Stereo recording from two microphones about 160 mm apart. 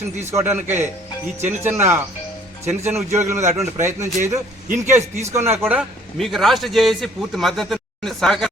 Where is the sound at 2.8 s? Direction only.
15° right (ahead or behind).